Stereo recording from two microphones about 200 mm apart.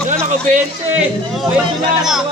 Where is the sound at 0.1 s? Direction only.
35° right (ahead or behind).